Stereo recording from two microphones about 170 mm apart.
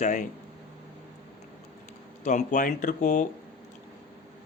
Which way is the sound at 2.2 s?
50° left (ahead or behind).